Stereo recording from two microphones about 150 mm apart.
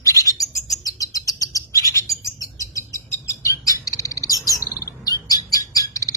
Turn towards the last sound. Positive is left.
turn(degrees=25)  # may be behind; listen again after turning